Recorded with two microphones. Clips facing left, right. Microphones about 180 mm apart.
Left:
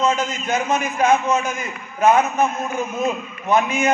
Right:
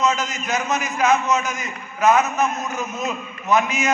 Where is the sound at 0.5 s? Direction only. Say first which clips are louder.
Left 2 dB; 30° left (ahead or behind).